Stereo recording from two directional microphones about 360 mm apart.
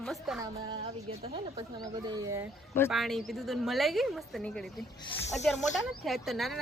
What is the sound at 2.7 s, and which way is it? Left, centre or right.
A woman's voice, centre.